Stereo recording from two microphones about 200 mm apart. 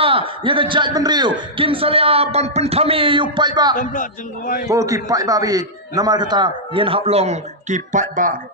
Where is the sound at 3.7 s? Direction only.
40° left (ahead or behind).